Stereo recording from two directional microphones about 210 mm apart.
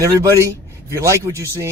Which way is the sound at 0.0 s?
15° right (ahead or behind).